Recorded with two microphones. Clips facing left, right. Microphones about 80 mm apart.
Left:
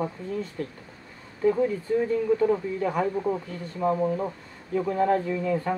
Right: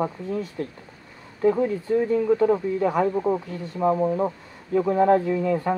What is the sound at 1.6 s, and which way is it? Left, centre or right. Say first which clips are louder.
Speech: right 2 dB; right.